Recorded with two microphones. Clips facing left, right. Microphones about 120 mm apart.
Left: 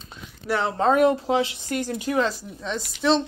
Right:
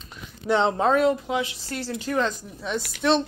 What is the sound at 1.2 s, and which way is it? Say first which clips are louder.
Speech: left 4 dB; 30° left (ahead or behind).